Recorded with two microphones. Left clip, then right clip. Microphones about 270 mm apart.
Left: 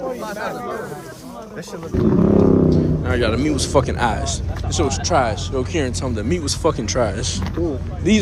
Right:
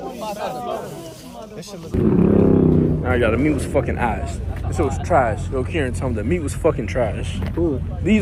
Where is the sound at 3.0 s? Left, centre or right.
Centre.